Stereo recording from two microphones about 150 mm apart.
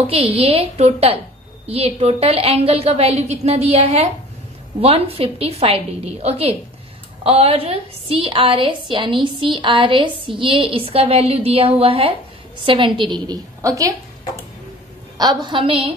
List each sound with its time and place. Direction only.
0.0 s a woman's voice: 40° right (ahead or behind); by 13.9 s 20° right (ahead or behind)
15.1 s a woman's voice: 30° right (ahead or behind)